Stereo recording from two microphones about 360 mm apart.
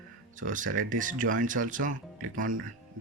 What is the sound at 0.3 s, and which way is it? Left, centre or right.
Speech, right.